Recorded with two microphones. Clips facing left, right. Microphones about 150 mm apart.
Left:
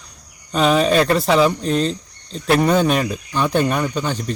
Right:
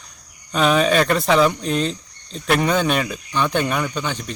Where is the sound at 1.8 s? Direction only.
35° left (ahead or behind).